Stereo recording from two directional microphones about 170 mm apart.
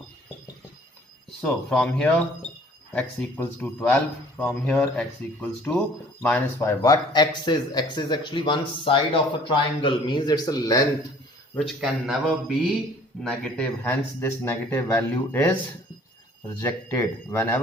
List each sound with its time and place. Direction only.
1.4 s a man's voice: 5° left (ahead or behind); by 10.8 s 20° left (ahead or behind)
11.5 s a man's voice: centre (ahead or behind)
16.6 s a man's voice: 15° left (ahead or behind)